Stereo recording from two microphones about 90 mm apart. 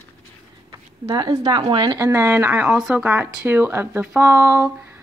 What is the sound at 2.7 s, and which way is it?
Speech, 5° right (ahead or behind).